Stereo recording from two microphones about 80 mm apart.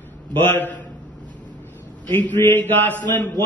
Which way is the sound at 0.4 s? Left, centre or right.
Left.